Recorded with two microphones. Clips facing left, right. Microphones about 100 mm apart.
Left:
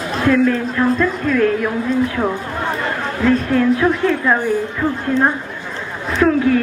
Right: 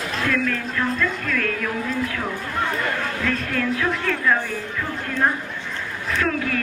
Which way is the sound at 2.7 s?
25° left (ahead or behind).